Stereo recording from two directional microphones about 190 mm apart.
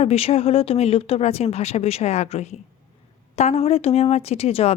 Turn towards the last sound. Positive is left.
turn(degrees=30)  # may be behind; listen again after turning